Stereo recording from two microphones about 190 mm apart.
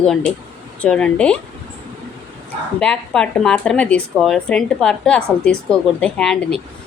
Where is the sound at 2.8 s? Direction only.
5° left (ahead or behind).